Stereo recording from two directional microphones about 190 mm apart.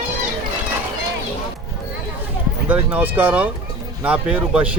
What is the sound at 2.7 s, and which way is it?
Speech, 10° right (ahead or behind).